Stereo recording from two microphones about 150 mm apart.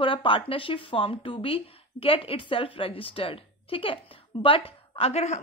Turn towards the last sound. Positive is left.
turn(degrees=45)  # may be behind; listen again after turning